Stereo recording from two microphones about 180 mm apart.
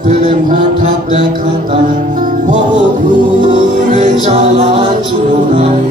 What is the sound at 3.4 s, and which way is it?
Music, 25° right (ahead or behind).